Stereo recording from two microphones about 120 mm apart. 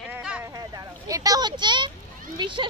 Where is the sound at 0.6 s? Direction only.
30° right (ahead or behind).